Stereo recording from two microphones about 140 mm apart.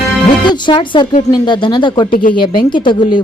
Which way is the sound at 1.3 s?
35° left (ahead or behind).